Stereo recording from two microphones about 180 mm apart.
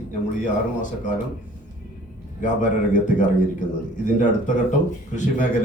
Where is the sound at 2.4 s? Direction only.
45° left (ahead or behind).